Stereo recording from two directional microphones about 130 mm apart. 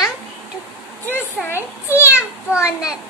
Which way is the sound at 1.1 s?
15° left (ahead or behind).